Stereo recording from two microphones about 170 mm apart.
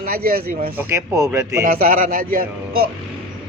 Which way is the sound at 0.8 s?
15° right (ahead or behind).